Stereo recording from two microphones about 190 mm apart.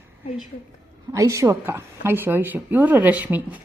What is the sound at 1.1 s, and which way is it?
A woman's voice, 15° right (ahead or behind).